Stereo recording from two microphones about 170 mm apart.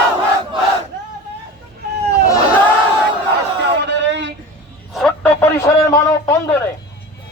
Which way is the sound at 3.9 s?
90° right.